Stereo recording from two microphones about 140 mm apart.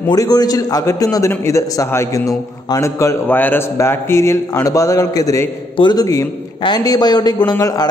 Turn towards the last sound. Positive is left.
turn(degrees=25)  # may be behind; listen again after turning